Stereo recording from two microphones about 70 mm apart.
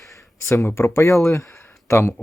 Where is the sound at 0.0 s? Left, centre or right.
Left.